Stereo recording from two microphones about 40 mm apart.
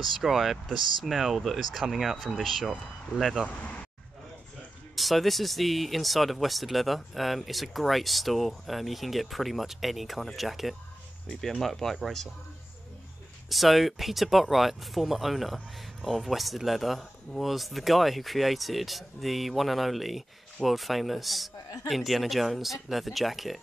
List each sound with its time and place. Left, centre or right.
0.2 s speech: centre
3.4 s speech: left
4.9 s speech: centre
11.2 s speech: centre
13.5 s speech: centre